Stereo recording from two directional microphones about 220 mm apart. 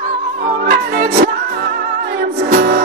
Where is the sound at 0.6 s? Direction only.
45° right (ahead or behind).